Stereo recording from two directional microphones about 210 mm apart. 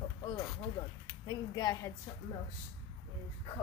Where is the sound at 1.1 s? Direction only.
20° left (ahead or behind).